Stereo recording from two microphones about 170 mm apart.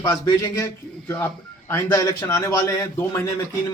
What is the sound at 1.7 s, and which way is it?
A man's voice, 15° left (ahead or behind).